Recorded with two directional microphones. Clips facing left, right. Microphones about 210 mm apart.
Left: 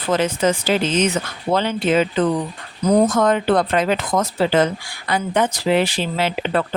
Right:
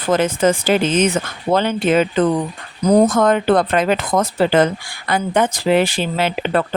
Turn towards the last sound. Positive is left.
turn(degrees=-55)  # may be behind; listen again after turning